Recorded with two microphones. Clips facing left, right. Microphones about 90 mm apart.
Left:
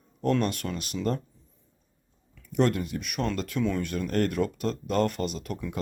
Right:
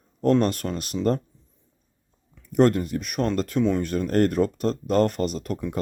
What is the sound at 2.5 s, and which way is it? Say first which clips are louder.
Speech: right 6 dB; 40° right (ahead or behind).